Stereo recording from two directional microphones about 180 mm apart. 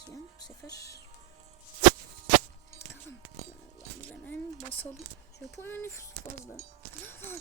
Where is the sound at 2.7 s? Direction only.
15° left (ahead or behind).